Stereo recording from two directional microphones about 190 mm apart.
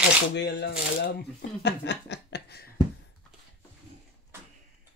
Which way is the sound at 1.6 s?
65° left (ahead or behind).